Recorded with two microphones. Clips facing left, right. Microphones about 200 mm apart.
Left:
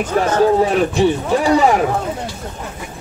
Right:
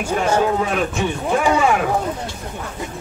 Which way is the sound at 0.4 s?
35° left (ahead or behind).